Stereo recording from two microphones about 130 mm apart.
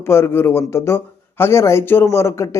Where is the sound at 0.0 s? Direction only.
20° left (ahead or behind).